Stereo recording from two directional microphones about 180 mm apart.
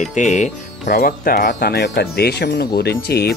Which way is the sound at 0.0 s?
40° left (ahead or behind).